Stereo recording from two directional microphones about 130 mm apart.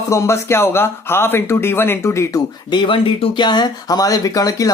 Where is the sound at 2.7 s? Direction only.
40° left (ahead or behind).